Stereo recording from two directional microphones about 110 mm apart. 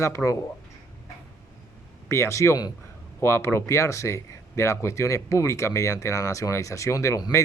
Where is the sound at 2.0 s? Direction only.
25° left (ahead or behind).